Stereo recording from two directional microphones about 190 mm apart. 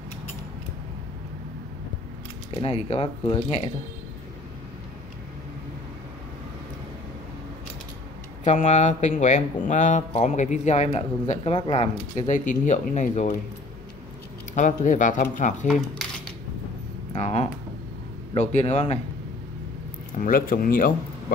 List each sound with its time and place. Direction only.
2.5 s speech: 30° left (ahead or behind)
8.5 s speech: 40° left (ahead or behind)
14.5 s speech: 40° left (ahead or behind)
15.7 s keys jangling: centre (ahead or behind)
17.1 s speech: 35° left (ahead or behind)
20.2 s speech: 50° left (ahead or behind)